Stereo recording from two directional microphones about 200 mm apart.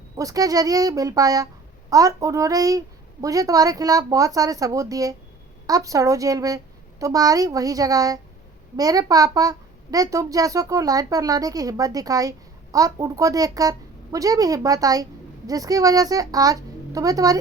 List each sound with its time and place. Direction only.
0.2 s a child's voice: 15° right (ahead or behind)